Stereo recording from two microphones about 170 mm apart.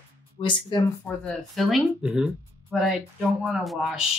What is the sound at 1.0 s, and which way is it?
Speech, 5° left (ahead or behind).